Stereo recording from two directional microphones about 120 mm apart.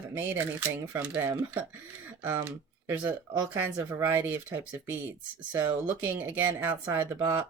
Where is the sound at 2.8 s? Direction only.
20° right (ahead or behind).